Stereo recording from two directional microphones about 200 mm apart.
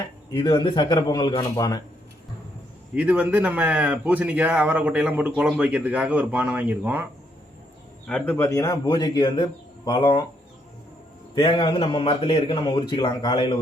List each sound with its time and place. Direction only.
0.0 s a man's voice: 20° left (ahead or behind)
2.9 s speech: 5° right (ahead or behind)
8.0 s a man's voice: 5° left (ahead or behind); by 10.2 s 25° left (ahead or behind)
11.3 s a man's voice: 25° left (ahead or behind)